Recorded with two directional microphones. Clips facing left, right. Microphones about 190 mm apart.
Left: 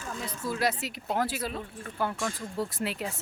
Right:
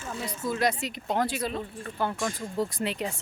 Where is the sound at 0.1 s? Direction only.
Centre (ahead or behind).